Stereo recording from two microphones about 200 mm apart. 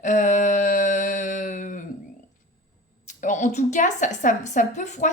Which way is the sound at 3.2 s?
40° left (ahead or behind).